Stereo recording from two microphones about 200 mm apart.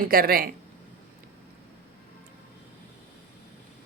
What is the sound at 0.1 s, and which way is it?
Speech, 45° right (ahead or behind).